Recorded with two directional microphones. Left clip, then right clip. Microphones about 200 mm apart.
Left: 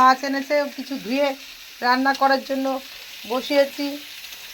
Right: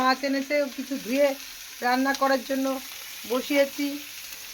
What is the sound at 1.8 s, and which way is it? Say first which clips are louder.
Stir: left 5 dB; 5° left (ahead or behind).